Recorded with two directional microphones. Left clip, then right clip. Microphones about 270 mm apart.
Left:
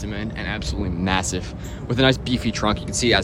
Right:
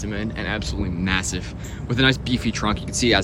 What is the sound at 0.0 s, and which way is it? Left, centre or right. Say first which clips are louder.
Speech: right 1 dB; centre.